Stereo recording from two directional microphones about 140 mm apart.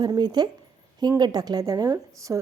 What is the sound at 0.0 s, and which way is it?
A woman's voice, 30° right (ahead or behind).